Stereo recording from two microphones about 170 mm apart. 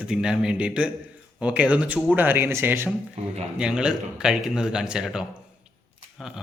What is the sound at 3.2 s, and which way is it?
Speech, 40° right (ahead or behind).